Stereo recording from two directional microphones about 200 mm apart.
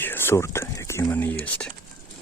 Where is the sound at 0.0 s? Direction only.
10° left (ahead or behind).